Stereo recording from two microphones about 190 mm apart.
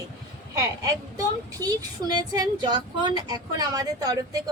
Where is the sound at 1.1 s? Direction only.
20° right (ahead or behind).